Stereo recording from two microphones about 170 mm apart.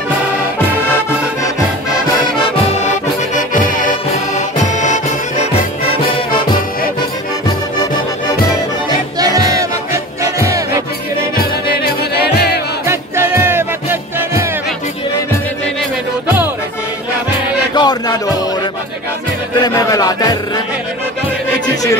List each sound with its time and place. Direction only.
4.7 s music: 45° left (ahead or behind)
9.2 s music: 20° right (ahead or behind)
11.8 s music: 70° left (ahead or behind)
12.8 s music: 15° right (ahead or behind)
17.7 s music: 25° left (ahead or behind)
19.6 s music: 20° left (ahead or behind)